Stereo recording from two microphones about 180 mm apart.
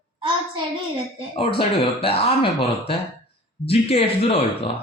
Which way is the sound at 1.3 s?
30° left (ahead or behind).